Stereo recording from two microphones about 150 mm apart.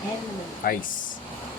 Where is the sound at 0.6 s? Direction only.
75° left (ahead or behind).